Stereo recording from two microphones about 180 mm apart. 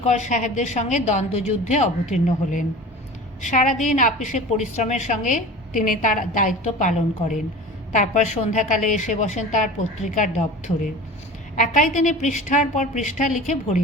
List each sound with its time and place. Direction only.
0.0 s a woman's voice: 40° left (ahead or behind)
11.6 s a woman's voice: 45° left (ahead or behind)